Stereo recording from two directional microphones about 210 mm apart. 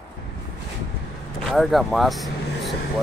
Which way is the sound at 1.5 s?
Centre (ahead or behind).